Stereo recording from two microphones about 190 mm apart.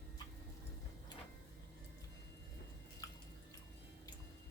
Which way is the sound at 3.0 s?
20° left (ahead or behind).